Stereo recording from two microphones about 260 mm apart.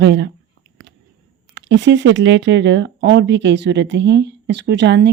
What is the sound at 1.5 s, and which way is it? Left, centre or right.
Speech, right.